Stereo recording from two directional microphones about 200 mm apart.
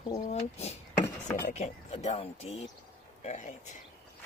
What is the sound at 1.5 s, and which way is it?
Speech, 35° left (ahead or behind).